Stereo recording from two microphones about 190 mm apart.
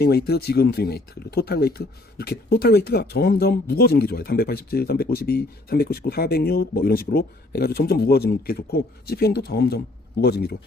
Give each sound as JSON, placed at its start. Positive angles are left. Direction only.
{"t": 0.0, "sound": "speech", "side_deg": 55}